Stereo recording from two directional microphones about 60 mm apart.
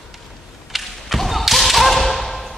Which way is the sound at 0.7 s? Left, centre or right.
Centre.